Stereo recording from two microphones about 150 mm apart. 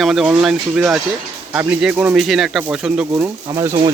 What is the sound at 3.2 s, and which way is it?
Speech, 20° right (ahead or behind).